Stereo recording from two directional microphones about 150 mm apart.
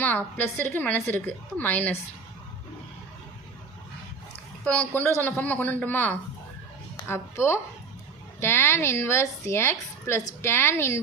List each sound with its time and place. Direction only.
0.0 s a woman's voice: 10° left (ahead or behind)
4.6 s a woman's voice: 10° left (ahead or behind)